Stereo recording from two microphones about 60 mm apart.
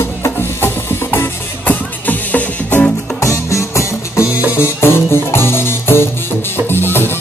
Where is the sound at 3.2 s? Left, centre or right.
Left.